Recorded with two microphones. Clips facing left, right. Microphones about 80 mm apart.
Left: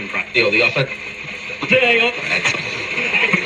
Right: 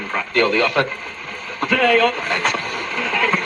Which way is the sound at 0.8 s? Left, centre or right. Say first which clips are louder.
Left 1 dB; right.